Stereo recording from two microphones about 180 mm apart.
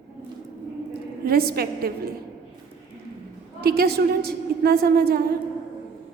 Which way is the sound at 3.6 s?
60° right (ahead or behind).